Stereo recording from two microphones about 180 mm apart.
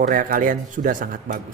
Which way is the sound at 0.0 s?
50° right (ahead or behind).